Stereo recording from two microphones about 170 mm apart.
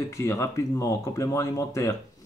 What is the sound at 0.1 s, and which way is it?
Speech, 15° left (ahead or behind).